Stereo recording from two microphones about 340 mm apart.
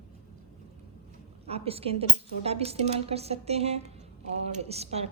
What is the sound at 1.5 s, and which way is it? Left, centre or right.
Speech, centre.